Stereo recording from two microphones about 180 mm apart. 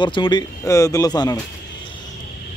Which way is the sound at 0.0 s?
25° left (ahead or behind).